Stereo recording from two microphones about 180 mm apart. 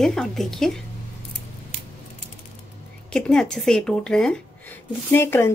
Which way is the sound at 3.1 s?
5° left (ahead or behind).